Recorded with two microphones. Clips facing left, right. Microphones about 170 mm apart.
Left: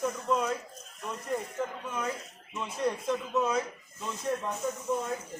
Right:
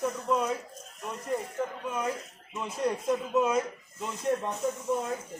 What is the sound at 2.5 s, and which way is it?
Speech, 10° right (ahead or behind).